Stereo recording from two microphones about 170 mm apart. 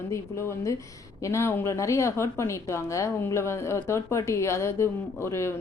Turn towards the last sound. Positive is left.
turn(degrees=15)  # may be behind; listen again after turning